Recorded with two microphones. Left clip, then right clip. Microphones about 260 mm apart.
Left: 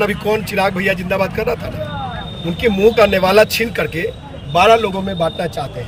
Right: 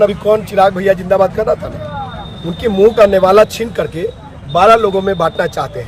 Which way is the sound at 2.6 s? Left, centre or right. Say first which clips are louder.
Right 3 dB; centre.